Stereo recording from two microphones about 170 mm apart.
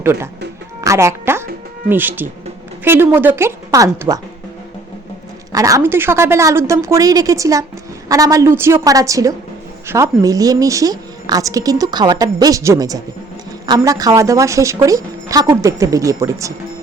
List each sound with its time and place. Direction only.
0.0 s a woman's voice: 15° right (ahead or behind)
5.5 s a woman's voice: 20° right (ahead or behind)